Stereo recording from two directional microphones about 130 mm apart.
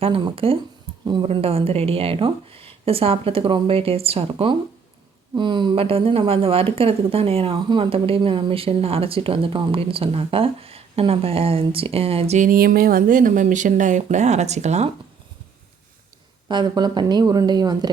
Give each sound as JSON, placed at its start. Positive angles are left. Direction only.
{"t": 0.0, "sound": "speech", "side_deg": -45}
{"t": 16.5, "sound": "speech", "side_deg": -35}